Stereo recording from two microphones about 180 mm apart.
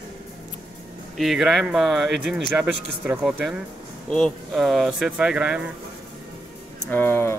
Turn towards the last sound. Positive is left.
turn(degrees=10)  # may be behind; listen again after turning